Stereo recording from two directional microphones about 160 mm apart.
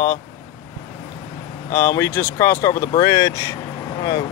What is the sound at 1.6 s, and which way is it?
Speech, 20° left (ahead or behind).